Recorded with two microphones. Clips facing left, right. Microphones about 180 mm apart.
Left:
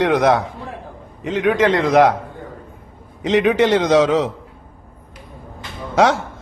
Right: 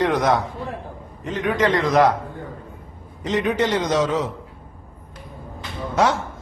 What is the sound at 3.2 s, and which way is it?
A man's voice, 80° left.